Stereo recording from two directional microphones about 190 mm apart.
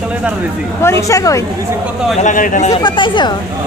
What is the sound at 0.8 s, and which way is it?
Speech, 15° left (ahead or behind).